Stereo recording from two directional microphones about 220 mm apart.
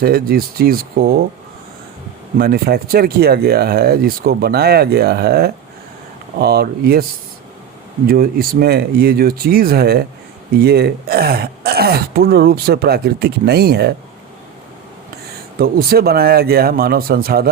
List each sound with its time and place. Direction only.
0.0 s speech: 45° right (ahead or behind)
2.4 s speech: 45° right (ahead or behind)
8.0 s speech: 40° right (ahead or behind)
15.5 s speech: 45° right (ahead or behind)